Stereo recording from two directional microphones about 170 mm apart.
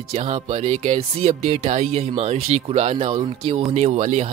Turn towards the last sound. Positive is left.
turn(degrees=-40)  # may be behind; listen again after turning